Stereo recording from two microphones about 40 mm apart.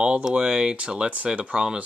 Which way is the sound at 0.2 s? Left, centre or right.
Right.